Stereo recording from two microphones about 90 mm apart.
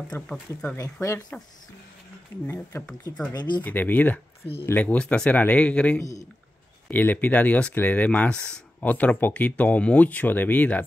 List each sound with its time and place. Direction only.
0.1 s speech: 15° left (ahead or behind)
2.7 s a man's voice: 35° left (ahead or behind)
3.3 s speech: 55° left (ahead or behind)
3.6 s speech: 20° left (ahead or behind)
5.9 s a man's voice: 35° left (ahead or behind)
6.9 s speech: 20° left (ahead or behind)